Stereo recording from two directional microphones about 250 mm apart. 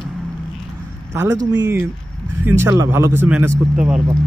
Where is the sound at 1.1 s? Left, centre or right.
Centre.